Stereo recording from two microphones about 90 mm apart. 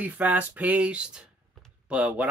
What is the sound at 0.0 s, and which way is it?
Speech, 20° right (ahead or behind).